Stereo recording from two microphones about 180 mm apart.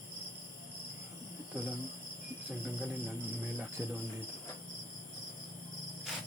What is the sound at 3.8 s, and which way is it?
Cricket, 10° right (ahead or behind).